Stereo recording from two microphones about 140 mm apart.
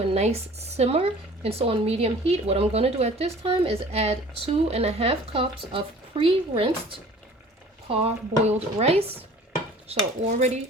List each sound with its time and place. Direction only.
0.1 s speech: 50° right (ahead or behind)
10.3 s speech: 50° right (ahead or behind)